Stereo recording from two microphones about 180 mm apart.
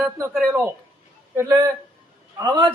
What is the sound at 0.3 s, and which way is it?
Speech, centre (ahead or behind).